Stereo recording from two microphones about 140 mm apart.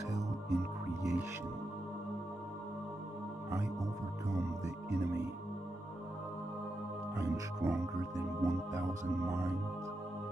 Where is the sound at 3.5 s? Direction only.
20° right (ahead or behind).